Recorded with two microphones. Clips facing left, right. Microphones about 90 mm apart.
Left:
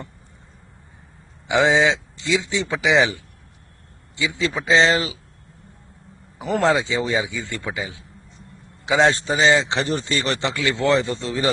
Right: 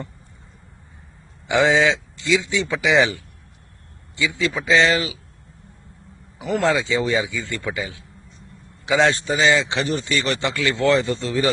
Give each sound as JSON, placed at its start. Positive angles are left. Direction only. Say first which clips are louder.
{"t": 1.5, "sound": "speech", "louder": "even", "side_deg": 20}
{"t": 6.4, "sound": "speech", "louder": "left 1 dB", "side_deg": 30}
{"t": 10.5, "sound": "speech", "louder": "right 1 dB", "side_deg": 20}